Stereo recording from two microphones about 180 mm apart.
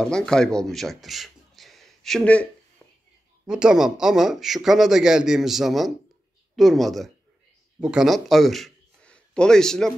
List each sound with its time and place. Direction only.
0.0 s speech: 5° left (ahead or behind)
3.4 s a man's voice: 5° right (ahead or behind)